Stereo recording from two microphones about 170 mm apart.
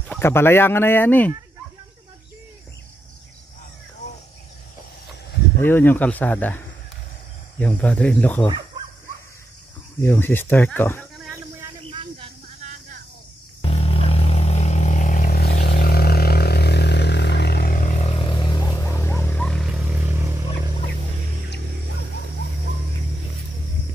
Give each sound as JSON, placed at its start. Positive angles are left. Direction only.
{"t": 0.1, "sound": "speech", "side_deg": 15}
{"t": 5.6, "sound": "speech", "side_deg": 10}
{"t": 10.0, "sound": "speech", "side_deg": 10}
{"t": 11.9, "sound": "snake", "side_deg": -30}
{"t": 13.6, "sound": "vehicle", "side_deg": 35}
{"t": 18.7, "sound": "a sound", "side_deg": 15}